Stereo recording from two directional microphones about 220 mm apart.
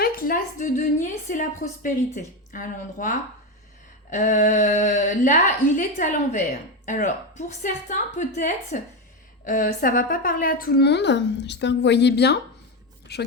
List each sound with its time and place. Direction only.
0.0 s a woman's voice: 40° left (ahead or behind)